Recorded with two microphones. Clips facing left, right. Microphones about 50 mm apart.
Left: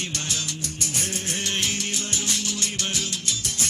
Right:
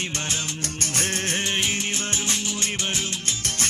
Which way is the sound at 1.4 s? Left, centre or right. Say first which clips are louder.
Right 2 dB; right.